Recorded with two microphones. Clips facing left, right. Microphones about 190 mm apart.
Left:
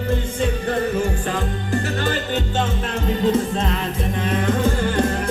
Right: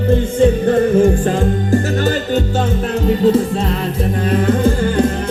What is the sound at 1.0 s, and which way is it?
Music, 45° right (ahead or behind).